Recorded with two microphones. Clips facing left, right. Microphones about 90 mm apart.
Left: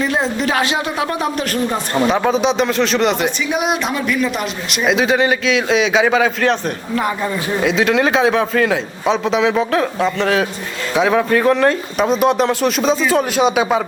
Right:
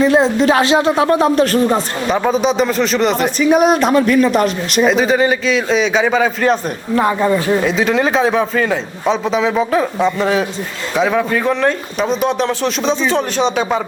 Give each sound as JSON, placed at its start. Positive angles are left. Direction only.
{"t": 0.0, "sound": "speech", "side_deg": -30}
{"t": 2.0, "sound": "a man's voice", "side_deg": 0}
{"t": 3.5, "sound": "speech", "side_deg": -40}
{"t": 4.9, "sound": "a man's voice", "side_deg": 0}
{"t": 6.9, "sound": "speech", "side_deg": -25}
{"t": 7.6, "sound": "a man's voice", "side_deg": 0}